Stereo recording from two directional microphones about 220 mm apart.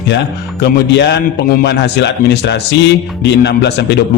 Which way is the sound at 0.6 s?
50° left (ahead or behind).